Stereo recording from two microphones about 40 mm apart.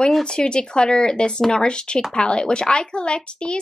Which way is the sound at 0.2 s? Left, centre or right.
Left.